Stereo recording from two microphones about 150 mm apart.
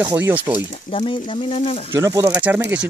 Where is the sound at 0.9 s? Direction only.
35° left (ahead or behind).